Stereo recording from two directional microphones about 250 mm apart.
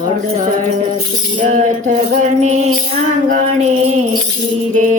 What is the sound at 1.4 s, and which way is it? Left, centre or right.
Music, right.